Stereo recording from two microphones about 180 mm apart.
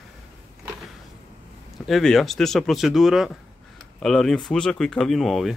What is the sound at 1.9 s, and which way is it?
Speech, centre (ahead or behind).